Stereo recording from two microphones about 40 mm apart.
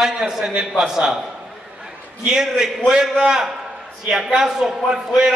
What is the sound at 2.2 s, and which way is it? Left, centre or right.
A man's voice, centre.